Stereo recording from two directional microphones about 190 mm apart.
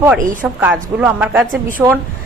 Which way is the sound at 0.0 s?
5° right (ahead or behind).